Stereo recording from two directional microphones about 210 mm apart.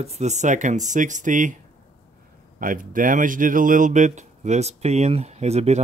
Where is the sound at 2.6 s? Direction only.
40° right (ahead or behind).